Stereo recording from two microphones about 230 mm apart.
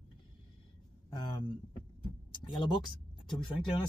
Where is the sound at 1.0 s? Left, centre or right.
Centre.